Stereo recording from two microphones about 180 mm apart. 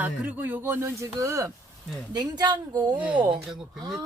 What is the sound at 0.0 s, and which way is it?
A woman's voice, 10° right (ahead or behind).